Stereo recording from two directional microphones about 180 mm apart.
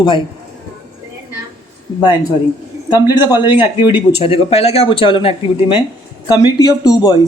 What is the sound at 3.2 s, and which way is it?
Speech, 25° left (ahead or behind).